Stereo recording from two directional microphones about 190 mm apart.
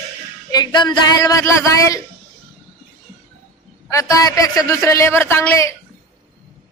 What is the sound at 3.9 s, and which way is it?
A man's voice, 15° left (ahead or behind).